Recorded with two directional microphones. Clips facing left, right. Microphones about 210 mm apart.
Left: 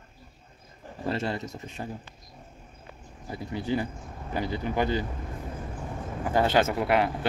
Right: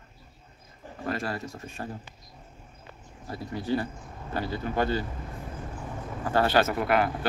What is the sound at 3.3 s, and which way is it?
Speech, 15° left (ahead or behind).